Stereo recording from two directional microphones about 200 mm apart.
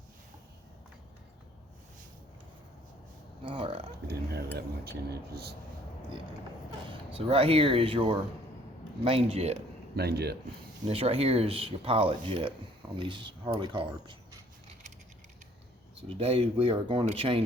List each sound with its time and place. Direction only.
3.4 s a sound: 25° right (ahead or behind)
4.0 s speech: 55° right (ahead or behind)
7.1 s speech: 30° right (ahead or behind)
9.9 s speech: 55° right (ahead or behind)
10.8 s speech: 30° right (ahead or behind)
16.0 s speech: 30° right (ahead or behind)